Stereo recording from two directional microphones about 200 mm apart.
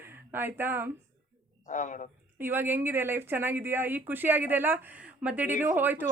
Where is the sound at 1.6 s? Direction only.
40° left (ahead or behind).